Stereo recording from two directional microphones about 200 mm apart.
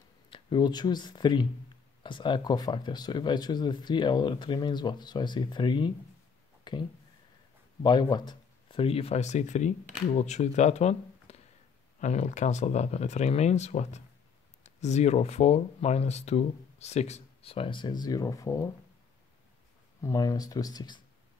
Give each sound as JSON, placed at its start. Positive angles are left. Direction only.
{"t": 0.3, "sound": "speech", "side_deg": 25}
{"t": 6.7, "sound": "a sound", "side_deg": 20}
{"t": 7.8, "sound": "speech", "side_deg": 20}
{"t": 20.0, "sound": "speech", "side_deg": 15}